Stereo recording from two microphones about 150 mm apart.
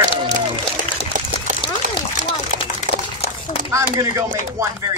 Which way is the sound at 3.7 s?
20° right (ahead or behind).